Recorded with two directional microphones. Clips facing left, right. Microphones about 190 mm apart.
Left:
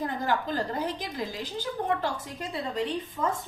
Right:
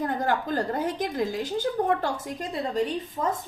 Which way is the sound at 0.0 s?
50° right (ahead or behind).